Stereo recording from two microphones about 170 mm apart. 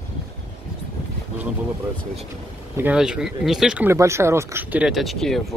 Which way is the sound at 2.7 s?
10° right (ahead or behind).